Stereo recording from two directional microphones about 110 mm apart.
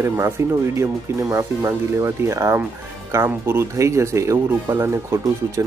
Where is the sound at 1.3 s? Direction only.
25° right (ahead or behind).